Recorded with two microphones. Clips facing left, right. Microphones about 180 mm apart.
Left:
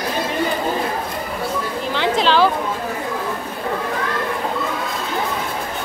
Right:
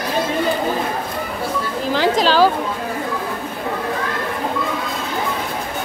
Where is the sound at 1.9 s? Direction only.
40° right (ahead or behind).